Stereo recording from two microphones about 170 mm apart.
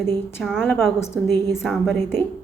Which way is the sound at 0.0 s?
15° left (ahead or behind).